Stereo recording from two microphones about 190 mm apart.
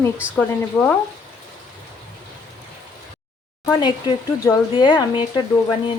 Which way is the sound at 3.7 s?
20° left (ahead or behind).